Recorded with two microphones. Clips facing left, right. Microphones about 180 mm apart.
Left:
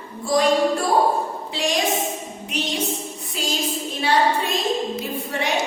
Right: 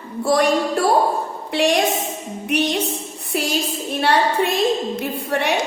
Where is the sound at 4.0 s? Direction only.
65° right (ahead or behind).